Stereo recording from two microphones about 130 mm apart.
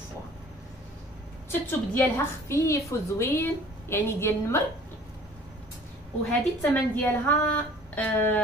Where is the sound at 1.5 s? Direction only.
15° left (ahead or behind).